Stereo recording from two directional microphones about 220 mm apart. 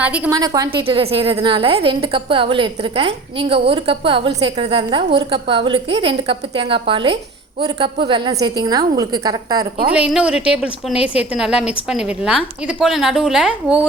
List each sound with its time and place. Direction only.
0.0 s a woman's voice: 10° right (ahead or behind)
9.9 s a woman's voice: 5° right (ahead or behind)